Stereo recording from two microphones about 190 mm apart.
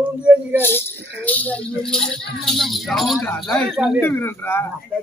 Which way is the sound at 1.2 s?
10° left (ahead or behind).